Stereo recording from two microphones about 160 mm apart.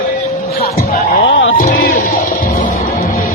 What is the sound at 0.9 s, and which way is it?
Music, 70° left (ahead or behind).